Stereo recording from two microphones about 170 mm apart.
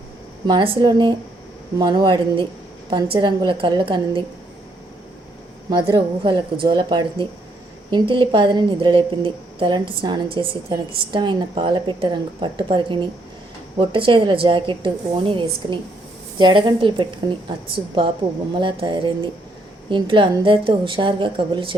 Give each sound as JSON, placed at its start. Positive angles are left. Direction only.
{"t": 0.4, "sound": "a woman's voice", "side_deg": -30}
{"t": 5.7, "sound": "a woman's voice", "side_deg": -30}
{"t": 18.5, "sound": "a woman's voice", "side_deg": -30}